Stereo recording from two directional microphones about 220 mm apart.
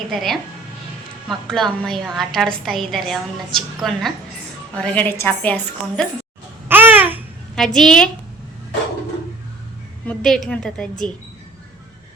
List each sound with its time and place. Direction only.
0.1 s a woman's voice: centre (ahead or behind)
6.7 s babbling: 10° right (ahead or behind)
7.5 s a woman's voice: centre (ahead or behind)
10.1 s a woman's voice: centre (ahead or behind)